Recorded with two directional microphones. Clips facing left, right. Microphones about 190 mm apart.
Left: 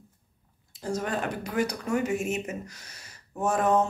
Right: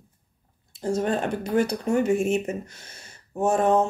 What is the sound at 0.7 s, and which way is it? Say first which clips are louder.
Speech: right 6 dB; 30° right (ahead or behind).